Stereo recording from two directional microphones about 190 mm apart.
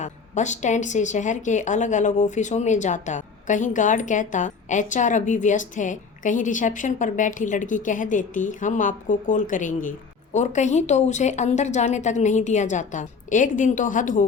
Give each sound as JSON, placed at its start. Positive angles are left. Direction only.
{"t": 0.0, "sound": "speech", "side_deg": 40}